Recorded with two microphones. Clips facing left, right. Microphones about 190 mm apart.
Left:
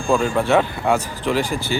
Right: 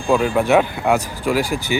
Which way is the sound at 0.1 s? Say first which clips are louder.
Right 2 dB; 5° right (ahead or behind).